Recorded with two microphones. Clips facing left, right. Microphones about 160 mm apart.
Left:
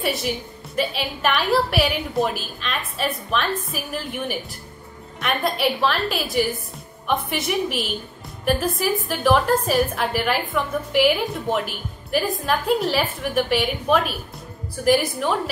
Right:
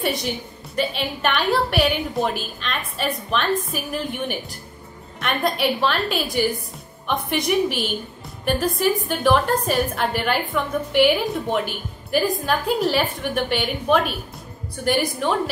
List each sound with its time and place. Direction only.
0.0 s a woman's voice: 5° left (ahead or behind)